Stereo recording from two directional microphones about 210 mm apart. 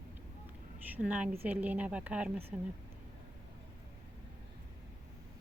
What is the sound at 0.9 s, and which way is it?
Speech, 5° right (ahead or behind).